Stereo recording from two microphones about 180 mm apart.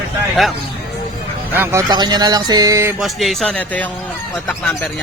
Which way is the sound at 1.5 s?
20° right (ahead or behind).